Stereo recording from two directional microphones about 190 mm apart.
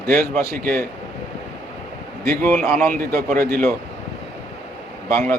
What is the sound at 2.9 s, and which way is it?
Speech, 50° right (ahead or behind).